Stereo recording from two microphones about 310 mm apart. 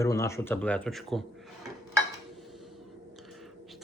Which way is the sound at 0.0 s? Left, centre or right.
Centre.